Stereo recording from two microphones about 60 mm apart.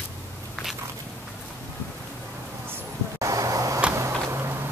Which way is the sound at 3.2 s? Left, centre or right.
Right.